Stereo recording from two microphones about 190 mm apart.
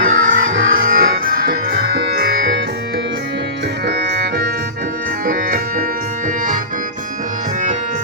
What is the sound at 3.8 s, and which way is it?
Music, 55° right (ahead or behind).